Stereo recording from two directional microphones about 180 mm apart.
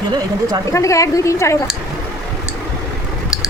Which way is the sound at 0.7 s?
15° left (ahead or behind).